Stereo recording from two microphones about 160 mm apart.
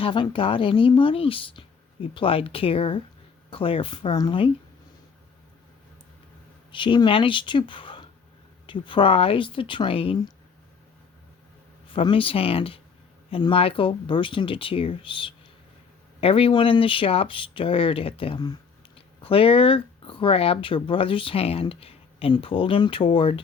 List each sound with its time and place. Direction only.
0.0 s speech: 30° left (ahead or behind)
6.7 s speech: 30° left (ahead or behind)
11.9 s speech: 35° left (ahead or behind)